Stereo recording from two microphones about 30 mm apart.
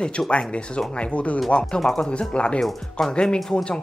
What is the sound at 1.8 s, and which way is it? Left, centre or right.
Speech, centre.